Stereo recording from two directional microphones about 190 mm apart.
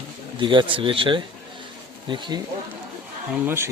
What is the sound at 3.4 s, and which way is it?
Speech, 10° right (ahead or behind).